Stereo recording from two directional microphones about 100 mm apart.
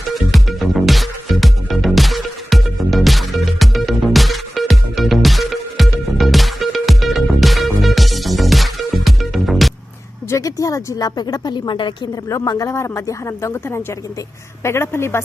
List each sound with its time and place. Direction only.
0.1 s music: centre (ahead or behind)
10.2 s speech: 35° left (ahead or behind); by 11.9 s 50° left (ahead or behind)
12.5 s a woman's voice: 35° left (ahead or behind)